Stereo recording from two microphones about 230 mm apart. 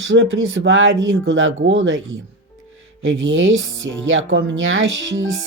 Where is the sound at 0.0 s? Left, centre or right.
Right.